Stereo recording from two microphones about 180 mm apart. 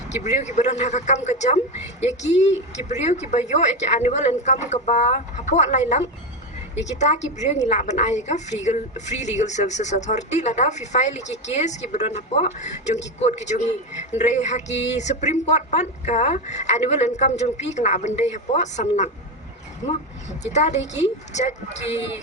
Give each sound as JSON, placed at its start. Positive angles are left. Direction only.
{"t": 0.1, "sound": "a woman's voice", "side_deg": 40}
{"t": 7.3, "sound": "a woman's voice", "side_deg": 40}
{"t": 19.8, "sound": "speech", "side_deg": 20}
{"t": 20.4, "sound": "a woman's voice", "side_deg": 40}